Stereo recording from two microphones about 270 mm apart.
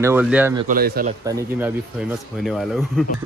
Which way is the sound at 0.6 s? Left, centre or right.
Right.